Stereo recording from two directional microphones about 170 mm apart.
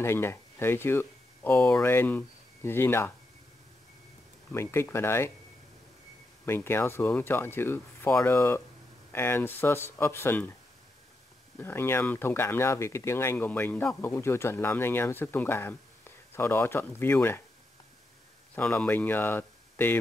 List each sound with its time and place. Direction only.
0.0 s speech: 15° left (ahead or behind)
4.5 s speech: 15° left (ahead or behind)
6.4 s speech: 15° left (ahead or behind)
11.5 s speech: 15° left (ahead or behind)
18.5 s speech: 10° left (ahead or behind)